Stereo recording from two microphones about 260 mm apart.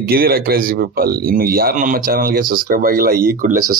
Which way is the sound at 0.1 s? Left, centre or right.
Right.